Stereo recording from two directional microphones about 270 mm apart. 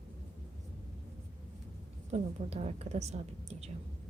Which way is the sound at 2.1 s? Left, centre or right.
Right.